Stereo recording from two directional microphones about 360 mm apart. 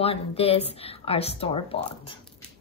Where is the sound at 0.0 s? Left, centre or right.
Centre.